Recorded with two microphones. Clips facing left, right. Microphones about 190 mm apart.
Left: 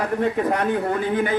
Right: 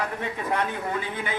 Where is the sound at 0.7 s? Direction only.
55° left (ahead or behind).